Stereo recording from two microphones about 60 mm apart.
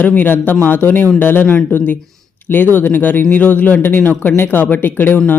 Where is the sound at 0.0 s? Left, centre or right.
Left.